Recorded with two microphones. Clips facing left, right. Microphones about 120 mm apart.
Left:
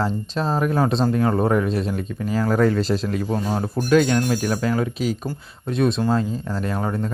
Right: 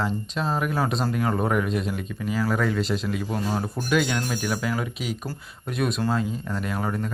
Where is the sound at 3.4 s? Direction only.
25° left (ahead or behind).